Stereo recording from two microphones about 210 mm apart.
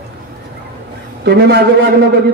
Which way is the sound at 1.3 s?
50° right (ahead or behind).